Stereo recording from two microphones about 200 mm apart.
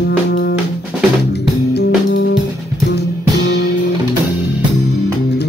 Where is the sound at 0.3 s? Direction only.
55° left (ahead or behind).